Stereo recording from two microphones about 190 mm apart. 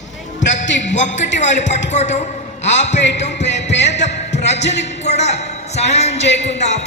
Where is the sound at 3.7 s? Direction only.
65° left (ahead or behind).